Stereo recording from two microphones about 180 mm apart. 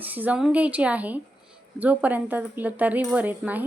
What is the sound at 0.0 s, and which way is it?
Speech, 10° right (ahead or behind).